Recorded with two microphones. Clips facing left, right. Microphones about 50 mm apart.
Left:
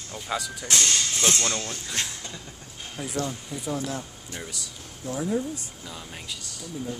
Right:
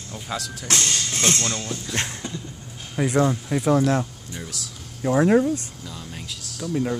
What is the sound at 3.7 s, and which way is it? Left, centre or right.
Speech, right.